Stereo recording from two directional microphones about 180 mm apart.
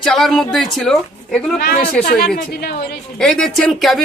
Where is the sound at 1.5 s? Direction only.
55° left (ahead or behind).